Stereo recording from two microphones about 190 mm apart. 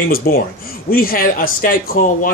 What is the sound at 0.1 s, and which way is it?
Speech, 50° left (ahead or behind).